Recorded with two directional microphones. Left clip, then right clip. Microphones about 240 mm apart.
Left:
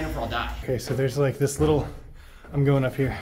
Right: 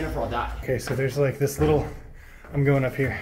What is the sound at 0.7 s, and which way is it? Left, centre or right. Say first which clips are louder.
Speech: even; centre.